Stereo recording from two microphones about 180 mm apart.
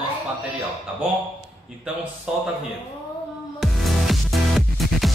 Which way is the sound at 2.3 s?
5° right (ahead or behind).